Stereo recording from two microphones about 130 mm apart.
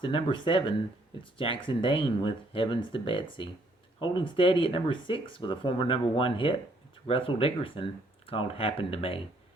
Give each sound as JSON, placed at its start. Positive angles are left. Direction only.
{"t": 0.0, "sound": "speech", "side_deg": 40}